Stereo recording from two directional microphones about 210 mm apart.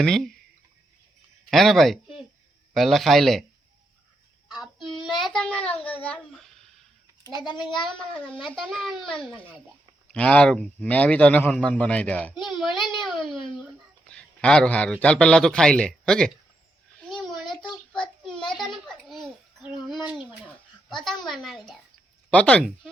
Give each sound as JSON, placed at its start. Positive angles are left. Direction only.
{"t": 0.0, "sound": "a child's voice", "side_deg": 0}
{"t": 1.5, "sound": "a child's voice", "side_deg": 0}
{"t": 4.4, "sound": "child singing", "side_deg": 0}
{"t": 5.2, "sound": "a child's voice", "side_deg": 5}
{"t": 7.9, "sound": "a child's voice", "side_deg": 0}
{"t": 12.7, "sound": "a child's voice", "side_deg": 20}
{"t": 13.2, "sound": "a child's voice", "side_deg": 0}
{"t": 17.0, "sound": "a sound", "side_deg": 5}
{"t": 17.6, "sound": "child singing", "side_deg": 5}
{"t": 18.3, "sound": "a sound", "side_deg": 25}
{"t": 18.5, "sound": "a sound", "side_deg": 0}
{"t": 20.9, "sound": "a child's voice", "side_deg": 0}